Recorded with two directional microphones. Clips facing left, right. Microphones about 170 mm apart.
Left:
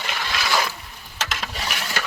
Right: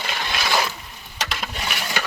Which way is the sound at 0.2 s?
20° right (ahead or behind).